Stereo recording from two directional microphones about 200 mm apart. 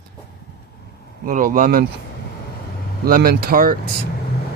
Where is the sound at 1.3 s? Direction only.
40° right (ahead or behind).